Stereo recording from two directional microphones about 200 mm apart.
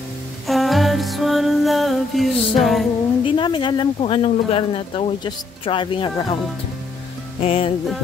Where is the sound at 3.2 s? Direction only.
25° left (ahead or behind).